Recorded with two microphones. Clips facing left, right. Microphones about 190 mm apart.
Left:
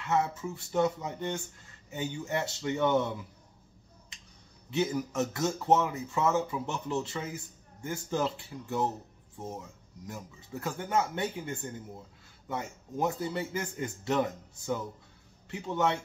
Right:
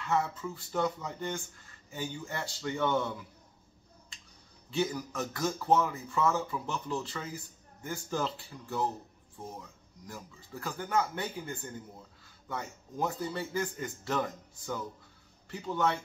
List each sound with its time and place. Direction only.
0.0 s speech: 20° left (ahead or behind)
4.6 s speech: 20° left (ahead or behind)